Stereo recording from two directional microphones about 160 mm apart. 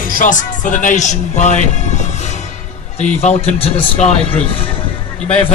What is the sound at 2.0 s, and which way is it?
Music, 45° left (ahead or behind).